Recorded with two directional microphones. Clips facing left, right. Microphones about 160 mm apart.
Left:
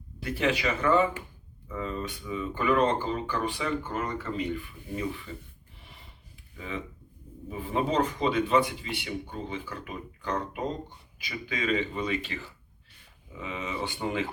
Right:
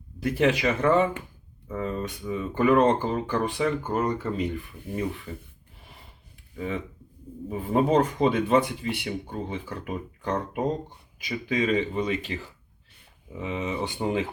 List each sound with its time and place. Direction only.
0.2 s speech: 45° right (ahead or behind)
7.5 s speech: 50° right (ahead or behind)